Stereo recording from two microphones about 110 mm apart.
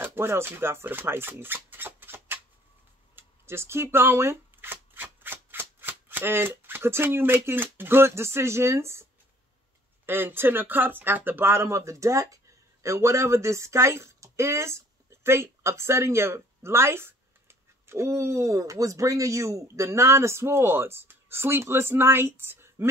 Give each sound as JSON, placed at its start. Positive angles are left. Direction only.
{"t": 0.0, "sound": "speech", "side_deg": -20}
{"t": 10.0, "sound": "speech", "side_deg": -20}